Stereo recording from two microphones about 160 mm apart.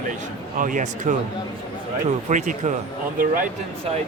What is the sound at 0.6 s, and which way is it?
Speech, 55° right (ahead or behind).